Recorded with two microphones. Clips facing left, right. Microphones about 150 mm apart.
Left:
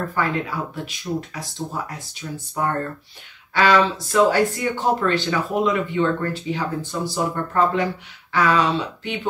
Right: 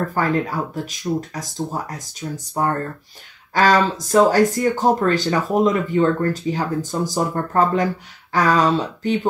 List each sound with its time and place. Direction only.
0.1 s speech: 40° right (ahead or behind)